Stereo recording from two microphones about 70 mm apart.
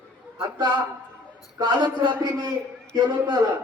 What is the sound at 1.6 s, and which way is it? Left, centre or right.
A man's voice, right.